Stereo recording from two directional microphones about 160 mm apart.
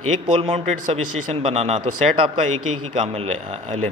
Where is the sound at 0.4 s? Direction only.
45° right (ahead or behind).